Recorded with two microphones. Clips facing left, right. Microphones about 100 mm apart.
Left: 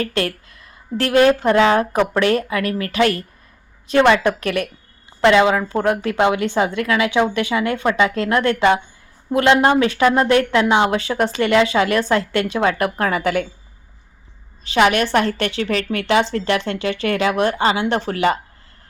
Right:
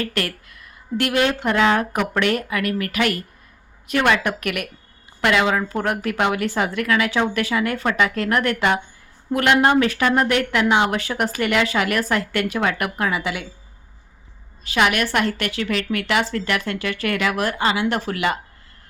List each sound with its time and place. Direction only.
0.0 s a woman's voice: 30° left (ahead or behind)
13.1 s a woman's voice: 50° left (ahead or behind)
14.6 s a woman's voice: 30° left (ahead or behind)